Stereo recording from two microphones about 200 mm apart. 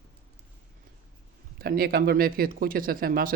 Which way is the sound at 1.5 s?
50° right (ahead or behind).